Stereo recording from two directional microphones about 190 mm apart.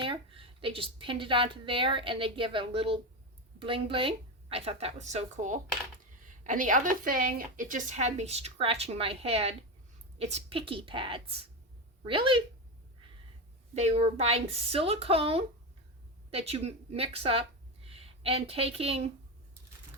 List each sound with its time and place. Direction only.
0.0 s a woman's voice: 30° right (ahead or behind)
13.7 s a woman's voice: 35° right (ahead or behind)